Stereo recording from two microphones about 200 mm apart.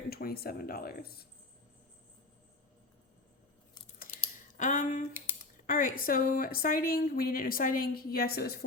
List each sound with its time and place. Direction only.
0.1 s speech: 50° left (ahead or behind)
4.2 s a sound: 40° left (ahead or behind)
5.6 s speech: 45° left (ahead or behind)